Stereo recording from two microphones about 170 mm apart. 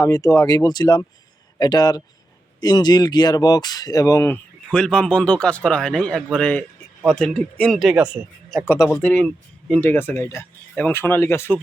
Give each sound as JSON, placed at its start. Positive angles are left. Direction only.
{"t": 0.0, "sound": "speech", "side_deg": 20}
{"t": 4.7, "sound": "speech", "side_deg": 5}
{"t": 9.0, "sound": "speech", "side_deg": 10}